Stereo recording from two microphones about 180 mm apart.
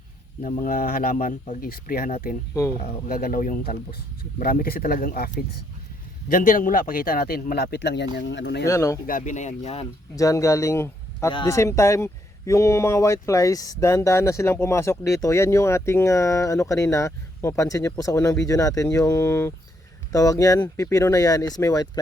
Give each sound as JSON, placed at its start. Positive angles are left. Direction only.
{"t": 0.4, "sound": "speech", "side_deg": 45}
{"t": 8.6, "sound": "speech", "side_deg": 15}
{"t": 9.0, "sound": "speech", "side_deg": 45}
{"t": 10.2, "sound": "speech", "side_deg": 15}